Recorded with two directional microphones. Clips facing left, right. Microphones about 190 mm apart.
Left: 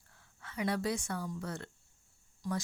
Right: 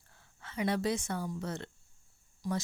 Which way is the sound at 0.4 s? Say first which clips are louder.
Right 2 dB; 25° right (ahead or behind).